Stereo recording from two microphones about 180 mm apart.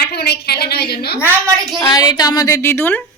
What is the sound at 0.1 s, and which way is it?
A woman's voice, 65° left (ahead or behind).